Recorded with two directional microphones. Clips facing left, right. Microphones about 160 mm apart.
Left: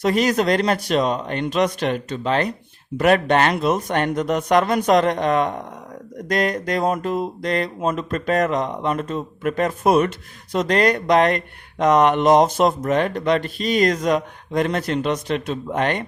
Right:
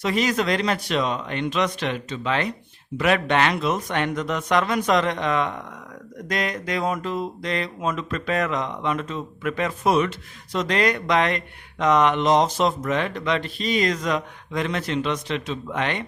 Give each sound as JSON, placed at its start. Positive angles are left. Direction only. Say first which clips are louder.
{"t": 0.0, "sound": "speech", "louder": "left 4 dB", "side_deg": 45}